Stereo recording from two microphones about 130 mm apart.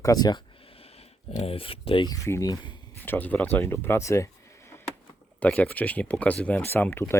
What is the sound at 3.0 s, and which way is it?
Speech, 15° left (ahead or behind).